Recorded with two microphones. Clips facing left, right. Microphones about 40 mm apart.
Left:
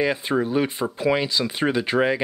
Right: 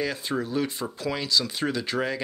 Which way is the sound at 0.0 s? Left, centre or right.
Left.